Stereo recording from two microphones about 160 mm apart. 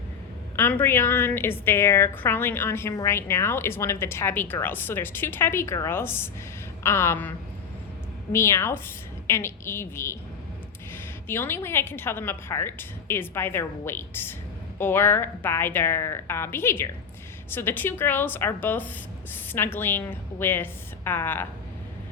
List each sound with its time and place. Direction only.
0.5 s a woman's voice: 15° left (ahead or behind)